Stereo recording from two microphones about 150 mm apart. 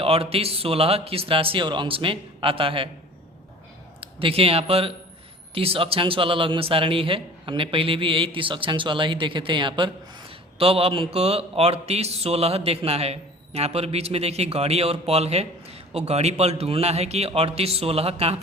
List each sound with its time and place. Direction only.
0.0 s a man's voice: 40° right (ahead or behind)
4.0 s a man's voice: 40° right (ahead or behind)